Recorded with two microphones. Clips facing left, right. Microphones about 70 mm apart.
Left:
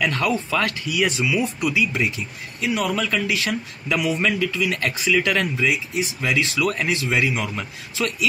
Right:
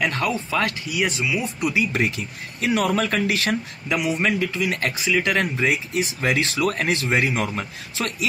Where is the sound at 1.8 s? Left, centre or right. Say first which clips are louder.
Right 1 dB; right.